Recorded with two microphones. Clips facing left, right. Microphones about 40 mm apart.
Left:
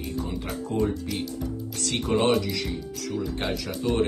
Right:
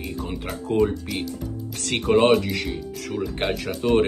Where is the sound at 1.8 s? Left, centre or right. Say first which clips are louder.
Right 6 dB; right.